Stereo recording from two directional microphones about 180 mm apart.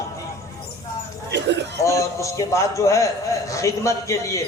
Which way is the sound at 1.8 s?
15° left (ahead or behind).